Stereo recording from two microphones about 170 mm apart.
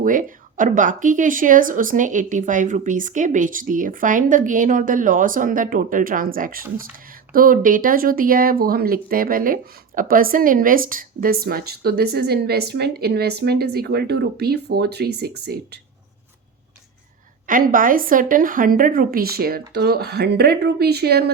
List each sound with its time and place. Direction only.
0.0 s speech: 50° right (ahead or behind); by 15.8 s 70° right (ahead or behind)
17.4 s speech: 55° right (ahead or behind)